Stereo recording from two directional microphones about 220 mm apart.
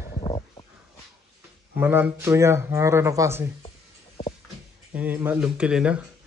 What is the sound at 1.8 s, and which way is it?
A man's voice, 10° right (ahead or behind).